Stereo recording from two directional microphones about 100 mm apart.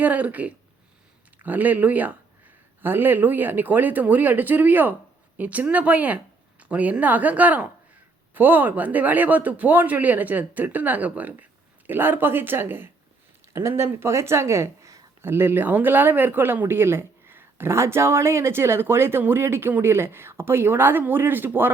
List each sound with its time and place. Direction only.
0.0 s speech: 15° right (ahead or behind)